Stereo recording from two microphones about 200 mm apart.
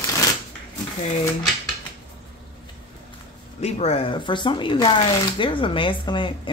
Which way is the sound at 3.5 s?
35° left (ahead or behind).